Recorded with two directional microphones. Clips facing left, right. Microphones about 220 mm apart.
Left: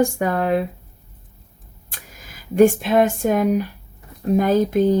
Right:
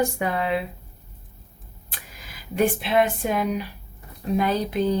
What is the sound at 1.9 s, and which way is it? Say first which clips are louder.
Speech: left 1 dB; 45° left (ahead or behind).